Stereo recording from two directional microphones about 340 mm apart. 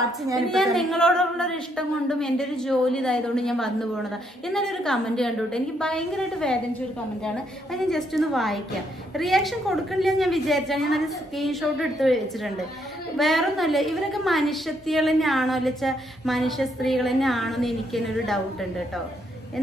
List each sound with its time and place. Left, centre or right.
0.5 s a woman's voice: centre